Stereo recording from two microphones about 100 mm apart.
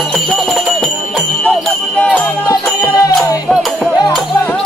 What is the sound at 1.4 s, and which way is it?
Jingle bell, 15° left (ahead or behind).